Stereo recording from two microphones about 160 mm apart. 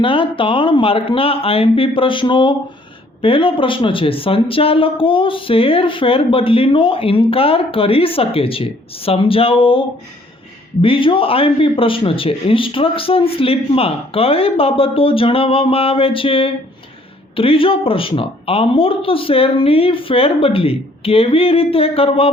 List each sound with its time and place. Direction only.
0.0 s speech: 35° left (ahead or behind)
10.8 s speech: 35° left (ahead or behind)